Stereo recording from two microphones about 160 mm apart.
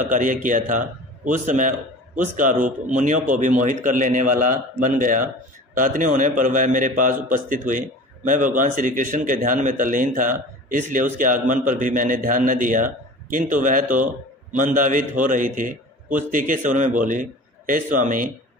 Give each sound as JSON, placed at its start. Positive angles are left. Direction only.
{"t": 0.0, "sound": "speech", "side_deg": -55}